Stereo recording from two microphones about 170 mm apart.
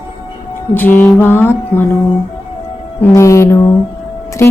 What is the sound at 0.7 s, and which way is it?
Speech, 10° left (ahead or behind).